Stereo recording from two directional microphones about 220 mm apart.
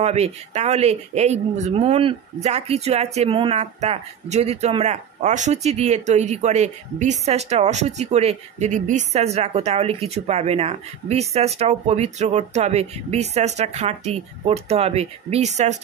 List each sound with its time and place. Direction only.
0.0 s speech: 30° right (ahead or behind)